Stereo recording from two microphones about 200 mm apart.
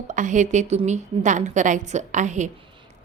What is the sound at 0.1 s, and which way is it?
A woman's voice, 40° right (ahead or behind).